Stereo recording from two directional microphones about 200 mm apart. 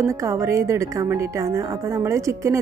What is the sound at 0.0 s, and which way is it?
A woman's voice, 15° right (ahead or behind).